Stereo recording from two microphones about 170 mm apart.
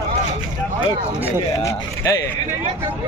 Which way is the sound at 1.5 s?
20° left (ahead or behind).